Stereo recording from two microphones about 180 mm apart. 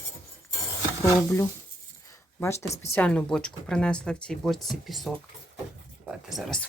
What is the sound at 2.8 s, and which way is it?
Speech, 10° left (ahead or behind).